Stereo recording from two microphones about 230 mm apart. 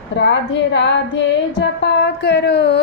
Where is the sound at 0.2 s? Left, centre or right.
Left.